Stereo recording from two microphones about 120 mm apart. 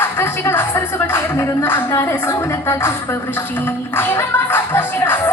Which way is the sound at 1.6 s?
20° left (ahead or behind).